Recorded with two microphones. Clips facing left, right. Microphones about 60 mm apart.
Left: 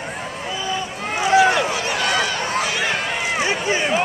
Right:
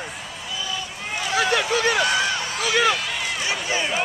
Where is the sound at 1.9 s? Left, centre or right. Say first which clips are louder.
Left 1 dB; left.